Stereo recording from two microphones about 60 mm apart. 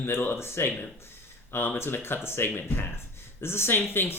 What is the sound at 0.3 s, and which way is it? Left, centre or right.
Speech, left.